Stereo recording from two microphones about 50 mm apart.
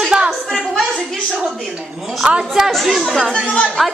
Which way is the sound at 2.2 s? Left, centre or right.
Right.